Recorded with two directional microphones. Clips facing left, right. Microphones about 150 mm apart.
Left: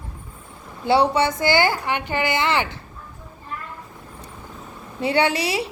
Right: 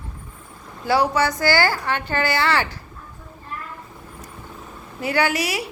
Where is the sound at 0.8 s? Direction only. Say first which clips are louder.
Left 1 dB; 25° left (ahead or behind).